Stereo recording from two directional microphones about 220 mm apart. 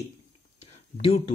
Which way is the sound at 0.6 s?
30° left (ahead or behind).